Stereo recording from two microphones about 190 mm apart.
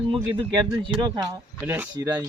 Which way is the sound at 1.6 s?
10° right (ahead or behind).